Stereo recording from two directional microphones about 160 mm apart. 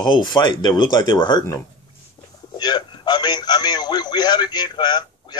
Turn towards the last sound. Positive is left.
turn(degrees=25)  # may be behind; listen again after turning